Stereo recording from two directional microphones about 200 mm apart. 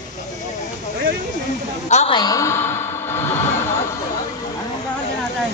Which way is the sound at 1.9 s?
35° left (ahead or behind).